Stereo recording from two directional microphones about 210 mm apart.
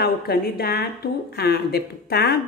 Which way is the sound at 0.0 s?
45° left (ahead or behind).